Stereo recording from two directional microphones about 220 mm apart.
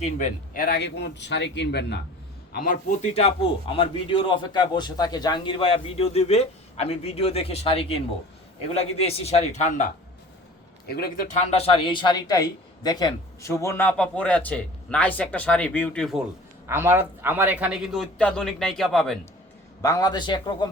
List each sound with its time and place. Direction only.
0.0 s a man's voice: 35° left (ahead or behind)
3.2 s a man's voice: 25° left (ahead or behind)
10.8 s speech: 45° left (ahead or behind); by 16.2 s centre (ahead or behind)
16.6 s a man's voice: 10° right (ahead or behind)
19.8 s a man's voice: 15° left (ahead or behind)